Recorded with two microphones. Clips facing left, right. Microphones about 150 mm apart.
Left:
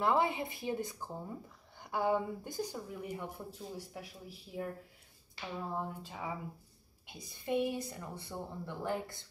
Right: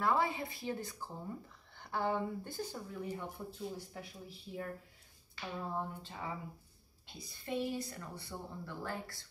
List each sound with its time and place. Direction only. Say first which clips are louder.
0.0 s speech: left 2 dB; 20° left (ahead or behind)